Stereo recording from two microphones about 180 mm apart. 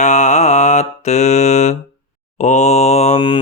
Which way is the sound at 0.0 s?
40° left (ahead or behind).